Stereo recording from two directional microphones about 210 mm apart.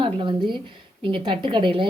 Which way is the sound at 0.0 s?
25° right (ahead or behind).